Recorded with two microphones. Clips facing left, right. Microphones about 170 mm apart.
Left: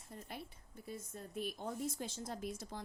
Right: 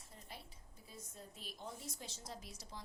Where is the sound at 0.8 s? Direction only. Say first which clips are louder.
Left 7 dB; 55° left (ahead or behind).